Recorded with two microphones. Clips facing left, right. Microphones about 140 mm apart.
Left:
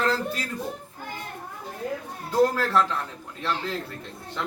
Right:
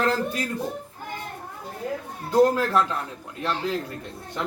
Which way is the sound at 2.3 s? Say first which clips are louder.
Right 2 dB; 15° right (ahead or behind).